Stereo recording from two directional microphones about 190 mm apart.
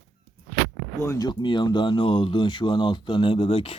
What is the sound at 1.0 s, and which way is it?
Speech, 20° left (ahead or behind).